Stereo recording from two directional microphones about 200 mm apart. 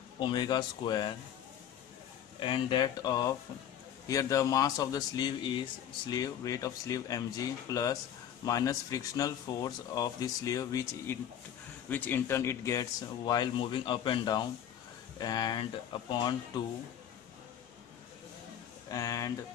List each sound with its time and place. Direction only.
0.2 s speech: 20° left (ahead or behind)
2.4 s speech: 20° left (ahead or behind)
18.9 s speech: 15° left (ahead or behind)